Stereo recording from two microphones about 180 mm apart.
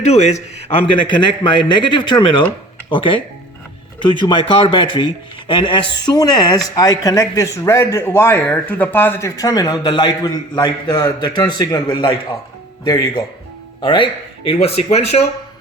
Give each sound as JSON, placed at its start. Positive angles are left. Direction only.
{"t": 0.0, "sound": "a man's voice", "side_deg": 40}